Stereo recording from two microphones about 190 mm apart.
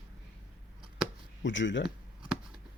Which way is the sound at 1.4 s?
75° left (ahead or behind).